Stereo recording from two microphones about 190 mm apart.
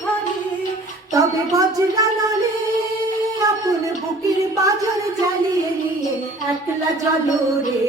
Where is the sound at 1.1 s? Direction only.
20° right (ahead or behind).